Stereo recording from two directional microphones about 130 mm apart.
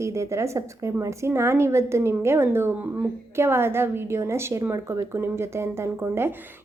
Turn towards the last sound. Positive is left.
turn(degrees=-20)  # may be behind; listen again after turning